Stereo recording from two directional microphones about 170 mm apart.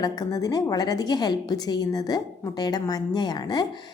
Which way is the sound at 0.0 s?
20° left (ahead or behind).